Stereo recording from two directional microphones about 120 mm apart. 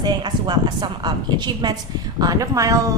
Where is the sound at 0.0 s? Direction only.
40° right (ahead or behind).